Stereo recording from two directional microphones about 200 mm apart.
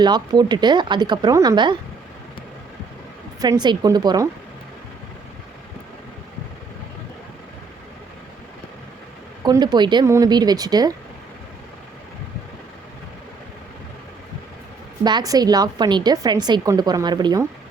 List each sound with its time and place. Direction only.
0.0 s a woman's voice: 20° right (ahead or behind)
3.4 s a woman's voice: 20° right (ahead or behind)
9.4 s a woman's voice: 20° right (ahead or behind)
15.0 s a woman's voice: 20° right (ahead or behind)